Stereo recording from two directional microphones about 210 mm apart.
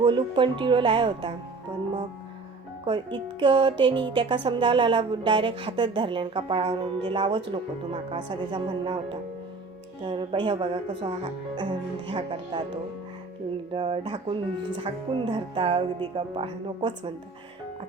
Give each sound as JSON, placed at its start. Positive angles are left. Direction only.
{"t": 0.0, "sound": "speech", "side_deg": -25}
{"t": 2.8, "sound": "speech", "side_deg": -25}